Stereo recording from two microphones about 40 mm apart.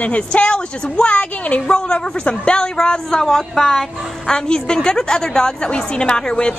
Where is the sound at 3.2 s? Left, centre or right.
Centre.